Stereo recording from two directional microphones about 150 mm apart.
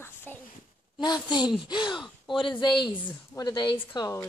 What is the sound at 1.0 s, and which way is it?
Speech, 30° left (ahead or behind).